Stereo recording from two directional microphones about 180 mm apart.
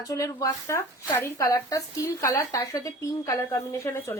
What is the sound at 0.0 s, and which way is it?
A woman's voice, 20° left (ahead or behind).